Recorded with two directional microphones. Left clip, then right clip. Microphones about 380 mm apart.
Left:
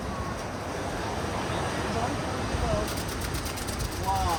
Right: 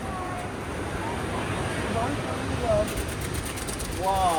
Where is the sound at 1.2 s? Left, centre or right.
Left.